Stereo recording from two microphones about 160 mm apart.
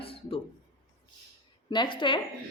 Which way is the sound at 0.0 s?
35° left (ahead or behind).